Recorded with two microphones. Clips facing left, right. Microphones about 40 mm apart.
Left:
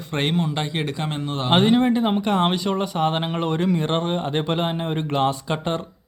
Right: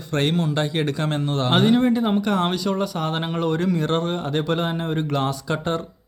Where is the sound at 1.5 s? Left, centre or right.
Left.